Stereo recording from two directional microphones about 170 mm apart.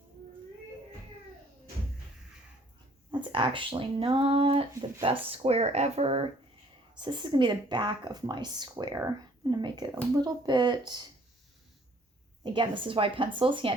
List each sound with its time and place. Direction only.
3.1 s speech: 30° right (ahead or behind)
12.4 s speech: 30° right (ahead or behind)